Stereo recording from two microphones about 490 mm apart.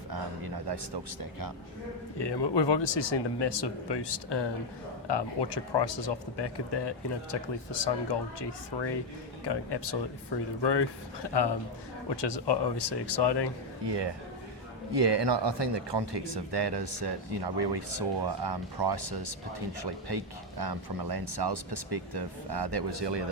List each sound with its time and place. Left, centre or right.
1.2 s speech: right
2.1 s speech: left
13.8 s speech: right